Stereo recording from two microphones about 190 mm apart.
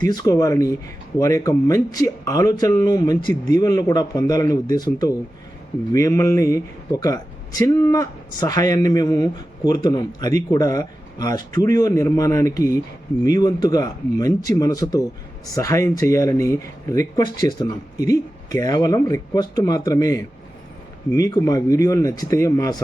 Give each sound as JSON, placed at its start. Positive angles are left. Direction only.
{"t": 0.1, "sound": "speech", "side_deg": 20}